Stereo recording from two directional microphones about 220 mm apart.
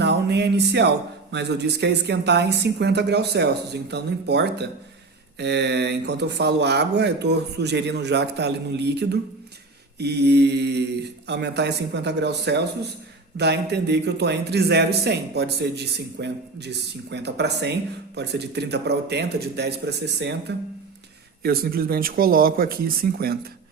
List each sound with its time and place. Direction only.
0.0 s a man's voice: 50° right (ahead or behind)
21.4 s a man's voice: 45° right (ahead or behind)